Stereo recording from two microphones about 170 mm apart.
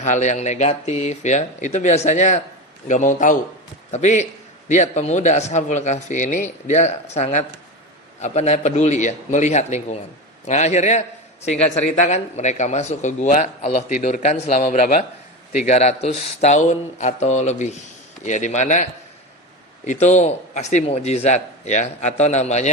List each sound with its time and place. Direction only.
0.0 s a man's voice: 45° left (ahead or behind)